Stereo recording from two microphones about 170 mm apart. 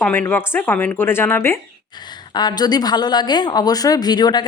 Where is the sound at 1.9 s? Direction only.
25° left (ahead or behind).